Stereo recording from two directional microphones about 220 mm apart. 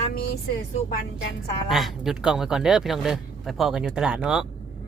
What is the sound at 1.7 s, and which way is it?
Speech, centre (ahead or behind).